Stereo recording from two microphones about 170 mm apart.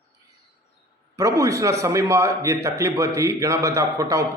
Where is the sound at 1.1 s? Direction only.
20° right (ahead or behind).